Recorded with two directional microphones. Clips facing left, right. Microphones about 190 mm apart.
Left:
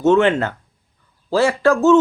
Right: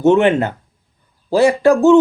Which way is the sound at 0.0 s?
15° right (ahead or behind).